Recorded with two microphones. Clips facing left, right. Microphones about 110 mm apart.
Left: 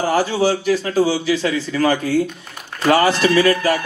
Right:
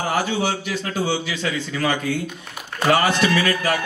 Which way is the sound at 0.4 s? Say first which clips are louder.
Left 7 dB; 40° left (ahead or behind).